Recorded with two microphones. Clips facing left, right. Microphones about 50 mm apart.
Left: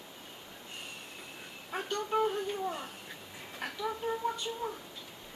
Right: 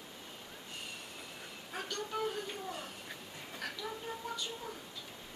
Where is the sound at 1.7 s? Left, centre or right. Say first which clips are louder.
Left 7 dB; left.